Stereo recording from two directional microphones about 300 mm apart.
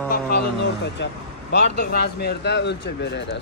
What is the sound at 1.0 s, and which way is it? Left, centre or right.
Speech, left.